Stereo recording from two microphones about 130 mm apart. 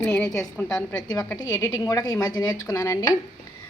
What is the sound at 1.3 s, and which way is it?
A woman's voice, 30° left (ahead or behind).